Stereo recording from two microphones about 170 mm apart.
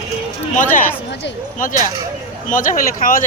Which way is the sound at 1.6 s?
50° left (ahead or behind).